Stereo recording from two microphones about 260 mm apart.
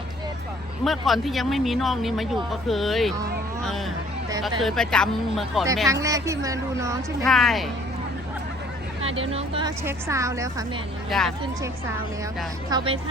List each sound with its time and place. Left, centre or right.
0.9 s speech: centre
3.6 s a sound: centre
4.6 s speech: centre
5.9 s a woman's voice: centre
7.3 s speech: centre
9.3 s a woman's voice: centre
11.1 s speech: centre
12.7 s speech: right